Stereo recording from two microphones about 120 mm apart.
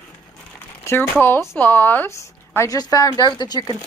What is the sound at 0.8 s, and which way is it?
Speech, 20° left (ahead or behind).